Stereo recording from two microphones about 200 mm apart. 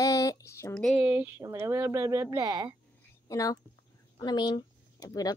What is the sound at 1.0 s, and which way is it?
Speech, 10° right (ahead or behind).